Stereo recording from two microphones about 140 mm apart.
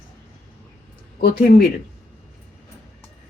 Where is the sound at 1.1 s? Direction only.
90° left.